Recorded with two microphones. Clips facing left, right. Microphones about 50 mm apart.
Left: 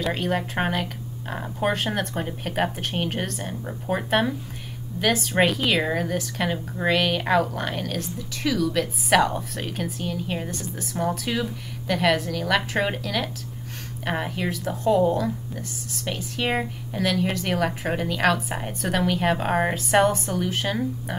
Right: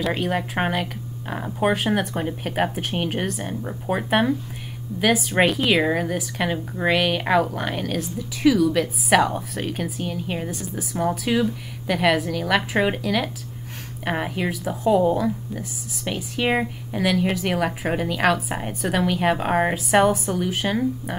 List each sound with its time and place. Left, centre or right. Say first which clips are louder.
0.0 s speech: right 1 dB; centre